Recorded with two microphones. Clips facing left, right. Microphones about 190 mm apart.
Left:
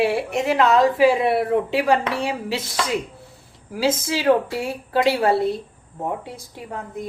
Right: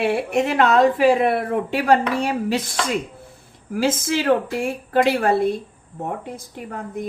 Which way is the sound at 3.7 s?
50° right (ahead or behind).